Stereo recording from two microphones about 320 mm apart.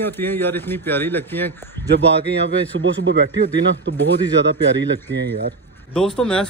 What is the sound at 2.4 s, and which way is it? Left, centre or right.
Speech, right.